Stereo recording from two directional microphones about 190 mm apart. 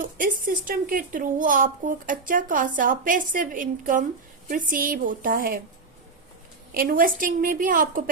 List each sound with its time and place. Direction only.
0.0 s a child's voice: 45° right (ahead or behind)
6.7 s a child's voice: 45° right (ahead or behind)